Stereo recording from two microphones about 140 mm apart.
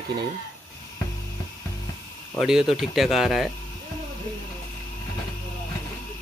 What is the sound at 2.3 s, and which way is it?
Speech, 5° right (ahead or behind).